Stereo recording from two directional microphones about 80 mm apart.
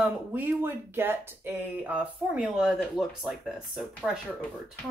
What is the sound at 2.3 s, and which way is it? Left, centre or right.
Speech, centre.